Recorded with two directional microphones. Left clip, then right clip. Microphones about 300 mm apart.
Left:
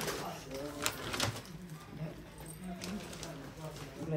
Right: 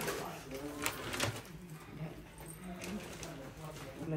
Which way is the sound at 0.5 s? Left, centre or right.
Centre.